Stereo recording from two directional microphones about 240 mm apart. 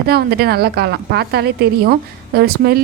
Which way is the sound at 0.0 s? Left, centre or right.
Right.